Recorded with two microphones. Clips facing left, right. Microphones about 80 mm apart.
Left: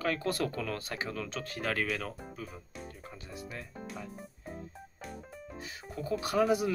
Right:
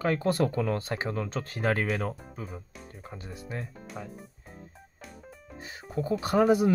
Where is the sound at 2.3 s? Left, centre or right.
Right.